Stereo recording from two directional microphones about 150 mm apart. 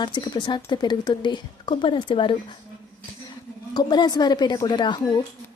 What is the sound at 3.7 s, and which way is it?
A woman's voice, 30° left (ahead or behind).